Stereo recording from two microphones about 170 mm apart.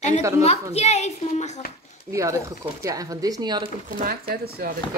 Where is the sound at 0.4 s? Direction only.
40° left (ahead or behind).